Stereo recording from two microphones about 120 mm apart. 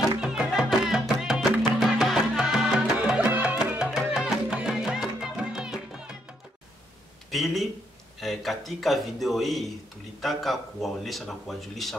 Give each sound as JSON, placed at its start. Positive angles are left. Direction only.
{"t": 0.2, "sound": "music", "side_deg": -5}
{"t": 7.2, "sound": "a sound", "side_deg": 0}
{"t": 8.2, "sound": "a man's voice", "side_deg": 0}